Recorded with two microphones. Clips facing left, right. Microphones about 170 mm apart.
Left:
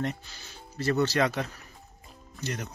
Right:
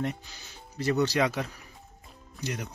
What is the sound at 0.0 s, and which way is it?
Speech, 15° right (ahead or behind).